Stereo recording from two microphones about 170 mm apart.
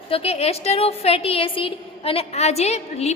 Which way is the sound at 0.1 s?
35° left (ahead or behind).